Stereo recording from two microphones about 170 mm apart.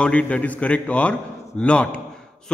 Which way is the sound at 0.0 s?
5° left (ahead or behind).